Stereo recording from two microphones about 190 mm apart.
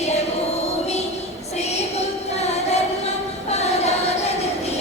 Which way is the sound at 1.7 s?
35° left (ahead or behind).